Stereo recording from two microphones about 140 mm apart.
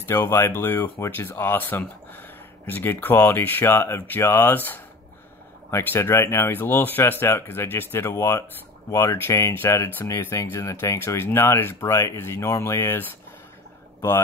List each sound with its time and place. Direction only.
0.0 s speech: 15° left (ahead or behind)